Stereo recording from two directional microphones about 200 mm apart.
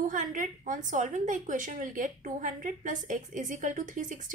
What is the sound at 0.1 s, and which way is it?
A woman's voice, 40° right (ahead or behind).